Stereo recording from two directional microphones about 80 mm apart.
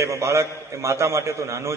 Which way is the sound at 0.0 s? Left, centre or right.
Right.